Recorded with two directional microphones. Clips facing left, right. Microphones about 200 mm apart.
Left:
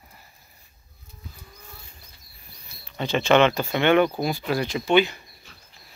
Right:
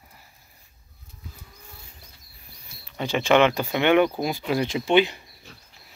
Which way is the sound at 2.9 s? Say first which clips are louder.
Left 1 dB; 10° right (ahead or behind).